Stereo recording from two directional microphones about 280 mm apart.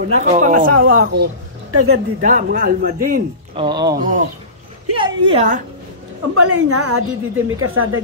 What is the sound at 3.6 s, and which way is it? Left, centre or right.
Speech, centre.